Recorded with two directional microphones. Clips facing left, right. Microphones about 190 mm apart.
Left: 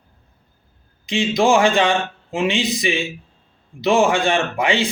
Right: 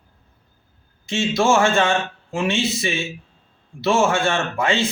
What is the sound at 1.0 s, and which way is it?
Speech, 15° left (ahead or behind).